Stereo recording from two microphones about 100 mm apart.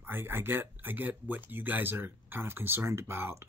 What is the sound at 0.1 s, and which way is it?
Speech, 25° right (ahead or behind).